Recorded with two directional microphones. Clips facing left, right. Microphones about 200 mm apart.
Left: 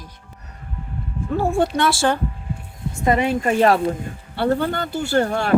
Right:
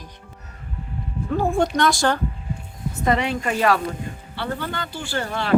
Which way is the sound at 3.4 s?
40° left (ahead or behind).